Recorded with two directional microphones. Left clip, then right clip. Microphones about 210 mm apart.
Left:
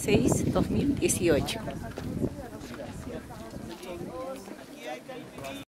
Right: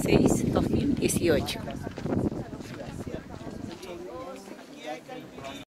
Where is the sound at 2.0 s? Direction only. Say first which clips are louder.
Right 4 dB; 35° left (ahead or behind).